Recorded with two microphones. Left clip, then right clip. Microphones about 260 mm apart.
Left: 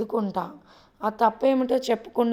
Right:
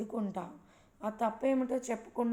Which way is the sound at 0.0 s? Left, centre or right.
Left.